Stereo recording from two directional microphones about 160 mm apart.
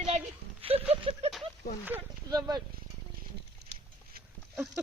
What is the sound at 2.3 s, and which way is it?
Speech, 25° right (ahead or behind).